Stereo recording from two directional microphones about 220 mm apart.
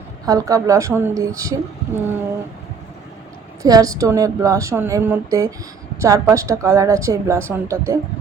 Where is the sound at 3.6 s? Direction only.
15° right (ahead or behind).